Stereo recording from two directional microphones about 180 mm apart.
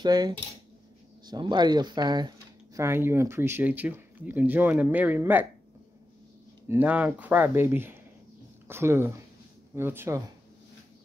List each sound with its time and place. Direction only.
0.0 s speech: 20° right (ahead or behind)
6.7 s speech: 10° right (ahead or behind)